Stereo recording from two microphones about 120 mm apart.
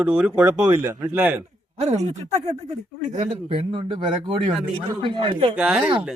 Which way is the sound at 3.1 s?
80° right.